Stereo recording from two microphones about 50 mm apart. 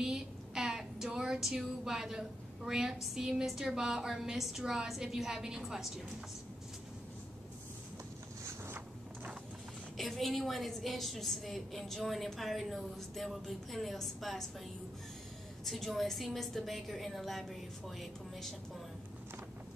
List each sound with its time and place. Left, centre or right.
0.0 s speech: centre
8.5 s boat: right
9.9 s a woman's voice: centre
15.6 s a woman's voice: centre